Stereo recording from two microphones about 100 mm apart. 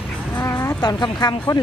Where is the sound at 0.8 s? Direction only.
45° left (ahead or behind).